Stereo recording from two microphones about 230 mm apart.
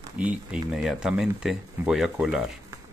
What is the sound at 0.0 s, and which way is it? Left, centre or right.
Speech, centre.